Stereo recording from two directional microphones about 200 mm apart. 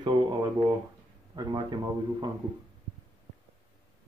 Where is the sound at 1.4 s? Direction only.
20° right (ahead or behind).